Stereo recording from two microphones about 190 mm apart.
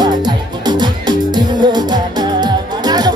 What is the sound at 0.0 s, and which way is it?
Music, 20° right (ahead or behind).